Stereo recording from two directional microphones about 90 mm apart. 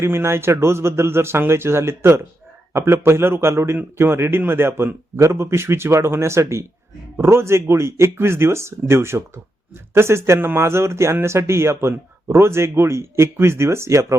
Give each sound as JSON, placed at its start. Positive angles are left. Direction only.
{"t": 0.0, "sound": "speech", "side_deg": -30}